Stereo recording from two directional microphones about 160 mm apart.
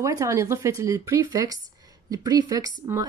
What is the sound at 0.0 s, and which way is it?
A woman's voice, 20° right (ahead or behind).